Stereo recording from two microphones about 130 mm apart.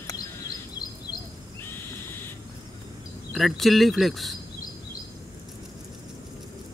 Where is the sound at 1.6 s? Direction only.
15° left (ahead or behind).